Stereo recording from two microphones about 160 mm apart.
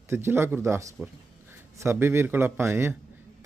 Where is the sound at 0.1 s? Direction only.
15° right (ahead or behind).